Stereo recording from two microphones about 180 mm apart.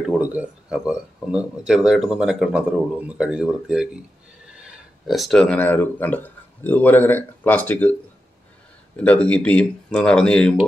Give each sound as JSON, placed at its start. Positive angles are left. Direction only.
{"t": 0.2, "sound": "speech", "side_deg": -10}
{"t": 8.9, "sound": "speech", "side_deg": 10}